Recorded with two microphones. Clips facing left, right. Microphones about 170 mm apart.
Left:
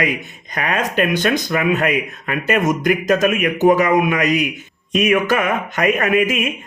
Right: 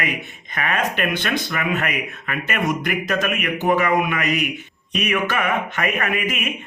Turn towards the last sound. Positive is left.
turn(degrees=40)  # may be behind; listen again after turning